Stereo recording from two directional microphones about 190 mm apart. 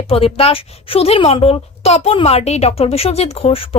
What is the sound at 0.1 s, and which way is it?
A woman's voice, 30° left (ahead or behind).